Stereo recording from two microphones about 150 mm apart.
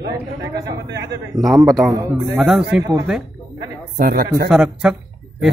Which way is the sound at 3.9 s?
75° right (ahead or behind).